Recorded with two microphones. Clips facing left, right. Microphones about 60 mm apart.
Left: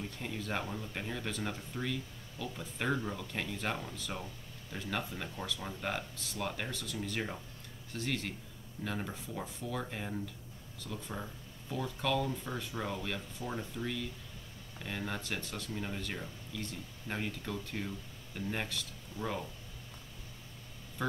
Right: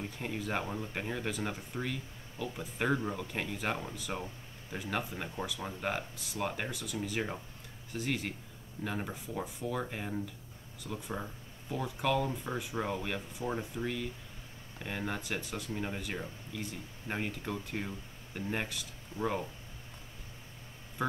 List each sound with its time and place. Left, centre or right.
0.2 s speech: centre